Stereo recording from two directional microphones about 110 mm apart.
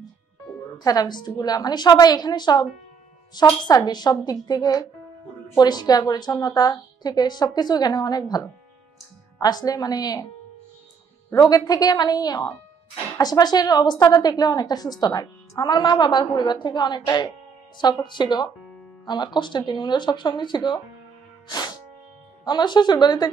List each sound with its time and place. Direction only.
0.7 s a woman's voice: 40° left (ahead or behind)
3.6 s a woman's voice: 40° left (ahead or behind)
11.3 s a woman's voice: 35° left (ahead or behind)
22.4 s a woman's voice: 40° left (ahead or behind)